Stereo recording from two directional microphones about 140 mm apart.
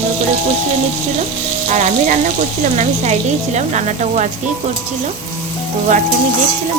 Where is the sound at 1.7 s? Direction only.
60° right (ahead or behind).